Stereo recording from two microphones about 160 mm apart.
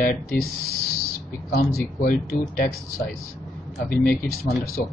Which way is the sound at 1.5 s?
70° left (ahead or behind).